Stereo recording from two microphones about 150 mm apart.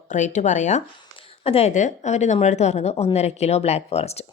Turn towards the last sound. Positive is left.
turn(degrees=45)  # may be behind; listen again after turning